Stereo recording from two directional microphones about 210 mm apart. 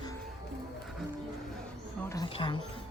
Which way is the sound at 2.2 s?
25° left (ahead or behind).